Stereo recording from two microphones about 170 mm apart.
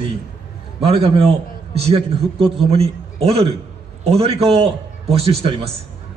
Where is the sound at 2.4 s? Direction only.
Centre (ahead or behind).